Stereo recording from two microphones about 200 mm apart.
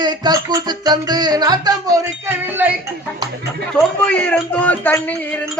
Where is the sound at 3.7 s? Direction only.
5° left (ahead or behind).